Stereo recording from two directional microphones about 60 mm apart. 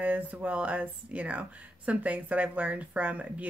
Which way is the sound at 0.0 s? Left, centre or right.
Right.